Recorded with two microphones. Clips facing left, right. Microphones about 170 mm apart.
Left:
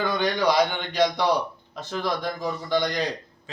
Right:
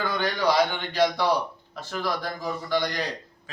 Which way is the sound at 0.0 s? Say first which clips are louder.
Left 2 dB; 15° left (ahead or behind).